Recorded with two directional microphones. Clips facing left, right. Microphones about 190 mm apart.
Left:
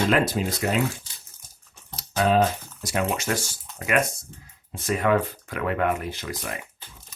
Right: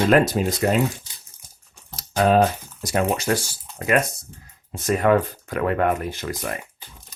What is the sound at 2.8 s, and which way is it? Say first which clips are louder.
Speech: right 4 dB; 35° right (ahead or behind).